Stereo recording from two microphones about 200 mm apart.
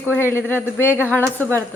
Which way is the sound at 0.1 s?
10° left (ahead or behind).